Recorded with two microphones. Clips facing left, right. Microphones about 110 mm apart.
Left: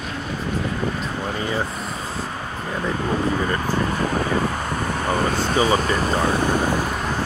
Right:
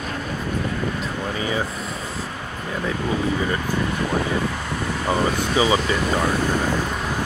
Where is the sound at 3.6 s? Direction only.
45° left (ahead or behind).